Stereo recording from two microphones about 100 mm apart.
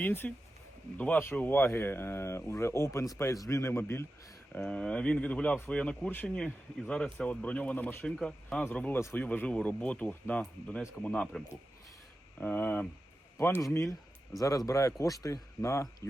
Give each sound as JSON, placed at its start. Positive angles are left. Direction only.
{"t": 0.0, "sound": "speech", "side_deg": 20}
{"t": 4.5, "sound": "speech", "side_deg": 10}
{"t": 14.3, "sound": "speech", "side_deg": 35}